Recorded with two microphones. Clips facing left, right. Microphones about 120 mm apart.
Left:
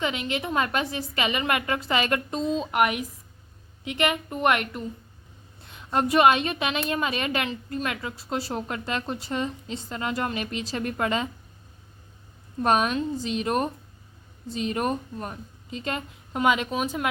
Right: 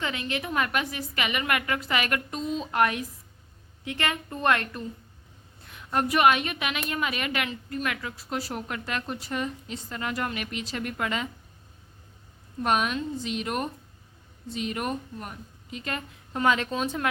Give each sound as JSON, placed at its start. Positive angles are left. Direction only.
{"t": 0.0, "sound": "a woman's voice", "side_deg": 20}
{"t": 12.6, "sound": "a woman's voice", "side_deg": 35}